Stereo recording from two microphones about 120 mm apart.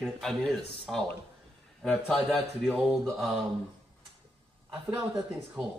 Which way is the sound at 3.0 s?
Centre (ahead or behind).